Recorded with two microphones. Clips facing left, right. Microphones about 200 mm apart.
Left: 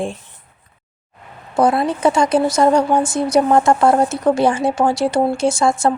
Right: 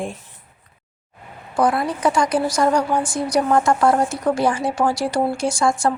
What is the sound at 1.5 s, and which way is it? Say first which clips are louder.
Speech: left 4 dB; 25° left (ahead or behind).